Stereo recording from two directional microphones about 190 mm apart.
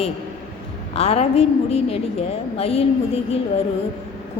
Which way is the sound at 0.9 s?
35° left (ahead or behind).